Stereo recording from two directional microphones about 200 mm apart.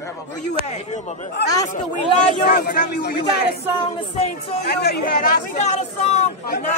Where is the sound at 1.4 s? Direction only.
55° left (ahead or behind).